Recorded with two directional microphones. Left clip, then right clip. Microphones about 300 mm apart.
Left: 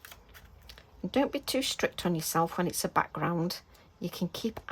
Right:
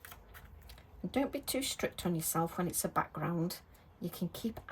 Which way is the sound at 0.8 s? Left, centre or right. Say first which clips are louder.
Left 6 dB; centre.